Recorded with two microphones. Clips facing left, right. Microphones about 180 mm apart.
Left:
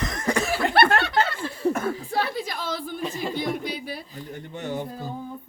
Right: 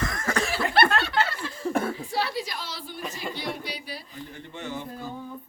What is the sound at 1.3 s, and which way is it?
Laughter, 60° left (ahead or behind).